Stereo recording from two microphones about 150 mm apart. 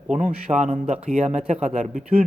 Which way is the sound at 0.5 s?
50° right (ahead or behind).